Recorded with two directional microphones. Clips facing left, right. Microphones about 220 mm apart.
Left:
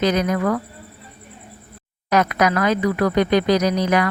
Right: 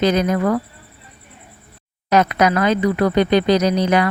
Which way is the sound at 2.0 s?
25° right (ahead or behind).